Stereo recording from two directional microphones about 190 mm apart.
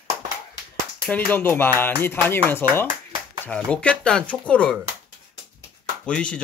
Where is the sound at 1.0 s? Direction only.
10° left (ahead or behind).